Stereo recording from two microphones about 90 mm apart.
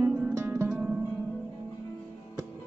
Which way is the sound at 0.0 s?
20° right (ahead or behind).